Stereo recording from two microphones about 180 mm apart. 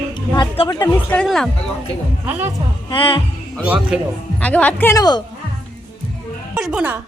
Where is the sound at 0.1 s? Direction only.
30° left (ahead or behind).